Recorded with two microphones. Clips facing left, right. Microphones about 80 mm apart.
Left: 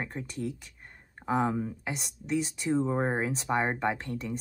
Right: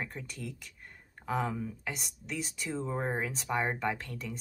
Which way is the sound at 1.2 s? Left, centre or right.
Left.